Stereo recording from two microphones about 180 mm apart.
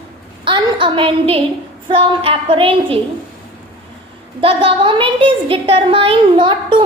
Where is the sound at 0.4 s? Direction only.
25° right (ahead or behind).